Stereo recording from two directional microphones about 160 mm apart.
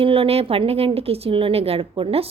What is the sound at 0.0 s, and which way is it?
Speech, 35° right (ahead or behind).